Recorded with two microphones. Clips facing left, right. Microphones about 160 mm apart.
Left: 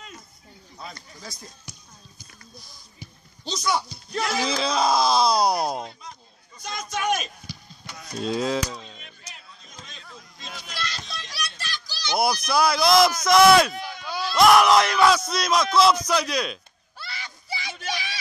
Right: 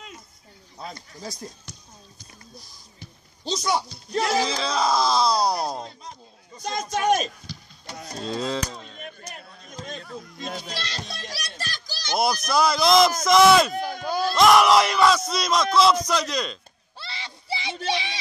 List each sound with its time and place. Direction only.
0.7 s speech: 25° right (ahead or behind)
3.4 s speech: 30° right (ahead or behind)
4.5 s speech: 15° left (ahead or behind)
6.6 s speech: 40° right (ahead or behind)
8.2 s speech: 10° left (ahead or behind)
8.6 s a sound: 50° right (ahead or behind)
10.5 s music: 35° right (ahead or behind)
11.1 s children playing: 45° right (ahead or behind)
12.5 s speech: 5° left (ahead or behind)
13.7 s a sound: 45° right (ahead or behind)
14.3 s speech: 5° left (ahead or behind)
17.0 s a sound: 25° right (ahead or behind)